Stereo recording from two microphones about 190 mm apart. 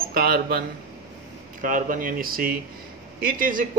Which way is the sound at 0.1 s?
50° right (ahead or behind).